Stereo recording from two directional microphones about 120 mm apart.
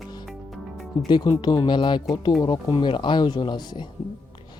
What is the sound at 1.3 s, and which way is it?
Speech, 35° left (ahead or behind).